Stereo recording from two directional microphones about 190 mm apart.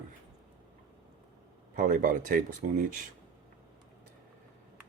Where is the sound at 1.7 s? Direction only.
45° right (ahead or behind).